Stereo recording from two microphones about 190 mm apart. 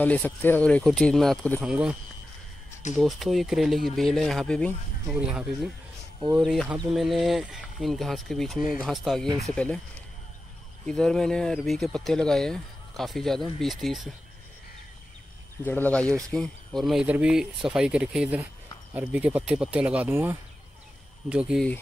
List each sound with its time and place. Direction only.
0.0 s speech: 10° left (ahead or behind)
3.0 s speech: centre (ahead or behind)
5.1 s speech: 5° right (ahead or behind)
10.9 s speech: 5° left (ahead or behind)
15.6 s speech: 10° left (ahead or behind)